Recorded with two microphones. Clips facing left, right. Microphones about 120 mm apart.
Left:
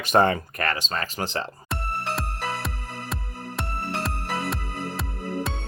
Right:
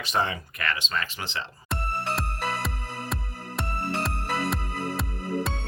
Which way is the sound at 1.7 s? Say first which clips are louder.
Right 2 dB; centre (ahead or behind).